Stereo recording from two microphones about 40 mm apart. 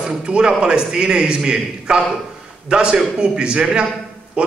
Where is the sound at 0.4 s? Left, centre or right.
Right.